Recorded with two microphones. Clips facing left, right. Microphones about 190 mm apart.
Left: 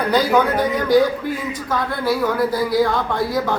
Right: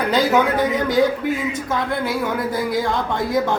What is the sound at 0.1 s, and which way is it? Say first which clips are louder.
Speech: left 1 dB; 20° right (ahead or behind).